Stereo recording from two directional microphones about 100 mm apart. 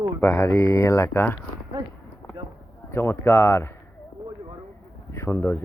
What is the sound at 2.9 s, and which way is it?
Speech, 25° left (ahead or behind).